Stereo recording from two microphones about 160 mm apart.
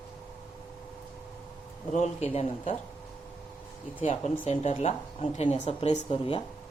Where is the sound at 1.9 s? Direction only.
45° left (ahead or behind).